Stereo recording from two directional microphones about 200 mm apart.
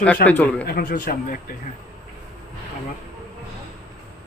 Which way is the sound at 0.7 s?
45° left (ahead or behind).